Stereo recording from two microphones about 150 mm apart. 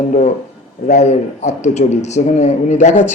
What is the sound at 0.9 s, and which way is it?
Speech, 50° left (ahead or behind).